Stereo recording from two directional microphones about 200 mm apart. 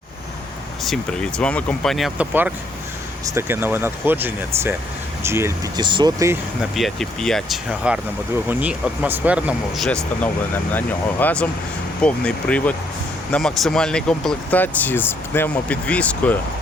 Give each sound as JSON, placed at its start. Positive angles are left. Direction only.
{"t": 0.9, "sound": "speech", "side_deg": 5}
{"t": 6.6, "sound": "speech", "side_deg": 0}